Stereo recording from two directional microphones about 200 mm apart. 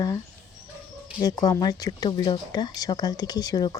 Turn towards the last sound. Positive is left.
turn(degrees=20)  # may be behind; listen again after turning